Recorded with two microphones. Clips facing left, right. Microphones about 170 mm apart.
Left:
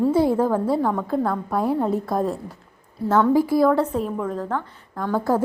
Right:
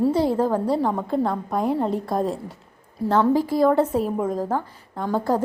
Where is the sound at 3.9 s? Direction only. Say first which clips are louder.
Right 2 dB; 40° right (ahead or behind).